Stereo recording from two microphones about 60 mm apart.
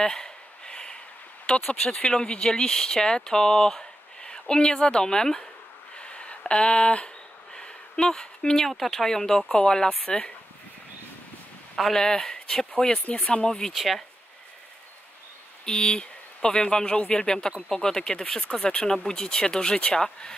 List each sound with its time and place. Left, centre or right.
0.0 s a sound: centre
1.4 s speech: centre
5.9 s a sound: centre
7.5 s speech: centre
11.7 s speech: centre
13.5 s speech: centre
15.6 s speech: centre